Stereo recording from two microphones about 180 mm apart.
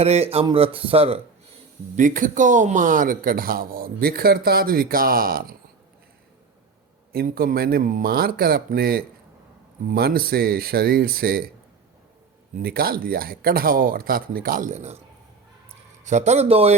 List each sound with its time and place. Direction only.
0.0 s speech: 35° right (ahead or behind)
2.0 s speech: 45° right (ahead or behind)
7.1 s speech: 55° right (ahead or behind)
12.5 s speech: 60° right (ahead or behind); by 14.9 s 40° right (ahead or behind)
16.0 s speech: 40° right (ahead or behind)